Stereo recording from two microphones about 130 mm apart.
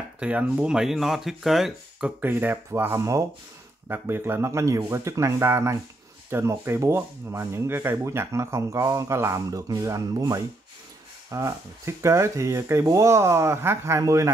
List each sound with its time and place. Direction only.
0.2 s speech: 10° right (ahead or behind)